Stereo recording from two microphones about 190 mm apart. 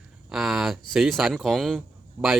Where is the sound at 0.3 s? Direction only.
Centre (ahead or behind).